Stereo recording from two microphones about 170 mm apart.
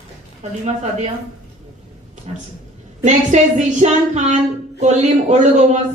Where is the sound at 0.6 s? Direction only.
45° right (ahead or behind).